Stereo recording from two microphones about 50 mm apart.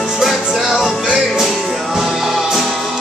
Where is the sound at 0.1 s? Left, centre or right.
Centre.